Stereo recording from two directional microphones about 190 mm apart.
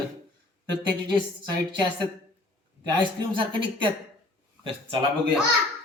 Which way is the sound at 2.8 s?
25° right (ahead or behind).